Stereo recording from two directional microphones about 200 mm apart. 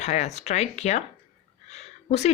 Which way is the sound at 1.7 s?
35° left (ahead or behind).